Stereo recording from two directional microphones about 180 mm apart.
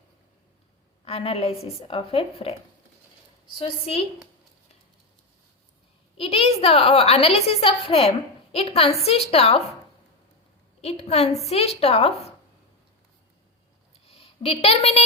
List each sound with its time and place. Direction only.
1.0 s a woman's voice: 35° left (ahead or behind)
3.6 s a woman's voice: 35° left (ahead or behind)
6.1 s a woman's voice: 30° left (ahead or behind)
10.8 s a woman's voice: 35° left (ahead or behind)
14.1 s a woman's voice: 30° left (ahead or behind)